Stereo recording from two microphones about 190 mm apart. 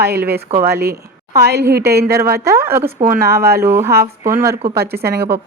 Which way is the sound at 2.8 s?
50° right (ahead or behind).